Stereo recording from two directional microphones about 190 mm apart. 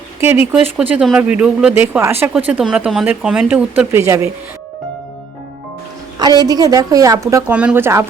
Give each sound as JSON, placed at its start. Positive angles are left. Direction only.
{"t": 0.5, "sound": "speech", "side_deg": -5}
{"t": 6.1, "sound": "speech", "side_deg": -20}